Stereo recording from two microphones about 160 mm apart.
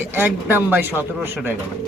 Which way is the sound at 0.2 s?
15° right (ahead or behind).